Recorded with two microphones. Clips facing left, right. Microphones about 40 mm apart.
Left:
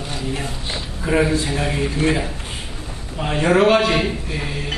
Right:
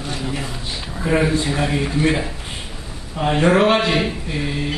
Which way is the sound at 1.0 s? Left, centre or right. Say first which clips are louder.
Even; centre.